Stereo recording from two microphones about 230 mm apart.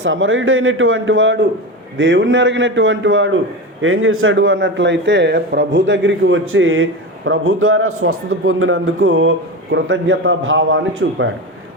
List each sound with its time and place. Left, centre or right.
0.0 s a man's voice: right